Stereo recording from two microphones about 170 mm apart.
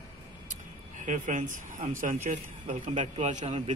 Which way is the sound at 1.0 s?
50° right (ahead or behind).